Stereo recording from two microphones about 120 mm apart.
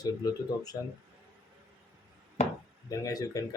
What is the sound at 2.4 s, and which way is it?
Chopping, 30° left (ahead or behind).